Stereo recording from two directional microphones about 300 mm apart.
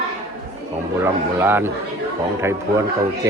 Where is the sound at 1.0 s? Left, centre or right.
Centre.